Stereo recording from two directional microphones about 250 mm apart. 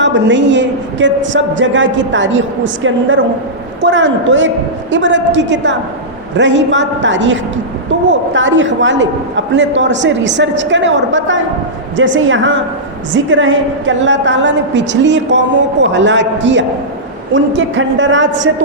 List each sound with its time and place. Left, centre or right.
0.0 s a man's voice: right
3.8 s a man's voice: right